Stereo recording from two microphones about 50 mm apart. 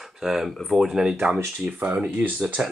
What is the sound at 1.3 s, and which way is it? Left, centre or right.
Speech, right.